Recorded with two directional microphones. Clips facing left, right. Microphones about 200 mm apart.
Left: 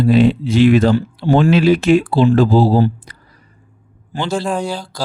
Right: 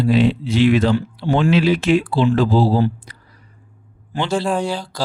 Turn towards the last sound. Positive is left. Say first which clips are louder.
# even
turn(degrees=-5)  # may be behind; listen again after turning